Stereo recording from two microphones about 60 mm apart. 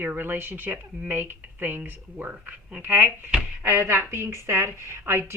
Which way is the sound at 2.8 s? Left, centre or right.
Right.